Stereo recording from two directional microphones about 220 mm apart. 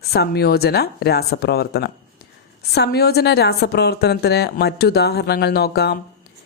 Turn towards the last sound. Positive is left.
turn(degrees=45)  # may be behind; listen again after turning